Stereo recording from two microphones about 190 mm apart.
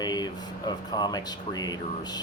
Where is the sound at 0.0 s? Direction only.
20° left (ahead or behind).